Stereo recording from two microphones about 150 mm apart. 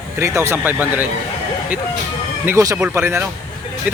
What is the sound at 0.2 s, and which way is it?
Speech, 15° right (ahead or behind).